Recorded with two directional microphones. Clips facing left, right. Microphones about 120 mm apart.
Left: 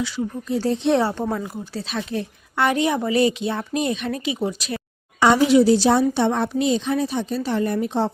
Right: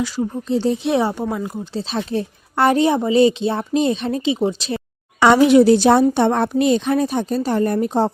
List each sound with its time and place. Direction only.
0.4 s speech: 25° right (ahead or behind)
0.8 s a woman's voice: 5° right (ahead or behind)
1.5 s speech: 25° right (ahead or behind)
5.2 s a woman's voice: 65° right (ahead or behind); by 8.1 s 40° right (ahead or behind)